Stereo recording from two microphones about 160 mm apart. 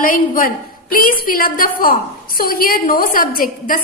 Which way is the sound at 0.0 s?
60° left (ahead or behind).